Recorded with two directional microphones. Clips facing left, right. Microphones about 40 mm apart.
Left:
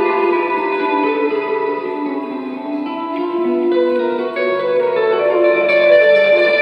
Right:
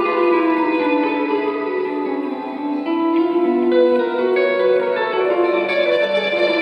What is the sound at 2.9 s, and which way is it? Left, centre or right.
Music, centre.